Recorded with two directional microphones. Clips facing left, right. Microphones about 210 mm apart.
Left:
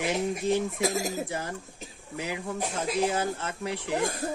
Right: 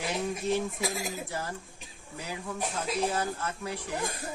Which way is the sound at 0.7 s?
45° left (ahead or behind).